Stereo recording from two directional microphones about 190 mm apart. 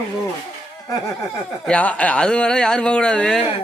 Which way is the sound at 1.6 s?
5° left (ahead or behind).